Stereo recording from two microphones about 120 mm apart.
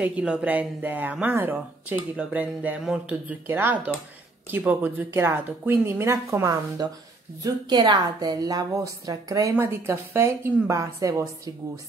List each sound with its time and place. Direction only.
0.0 s a woman's voice: 10° right (ahead or behind); by 11.8 s 25° right (ahead or behind)